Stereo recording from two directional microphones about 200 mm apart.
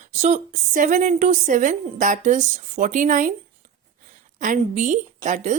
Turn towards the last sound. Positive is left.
turn(degrees=-40)  # may be behind; listen again after turning